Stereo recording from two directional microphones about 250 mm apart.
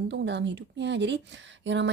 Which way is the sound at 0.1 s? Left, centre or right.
Right.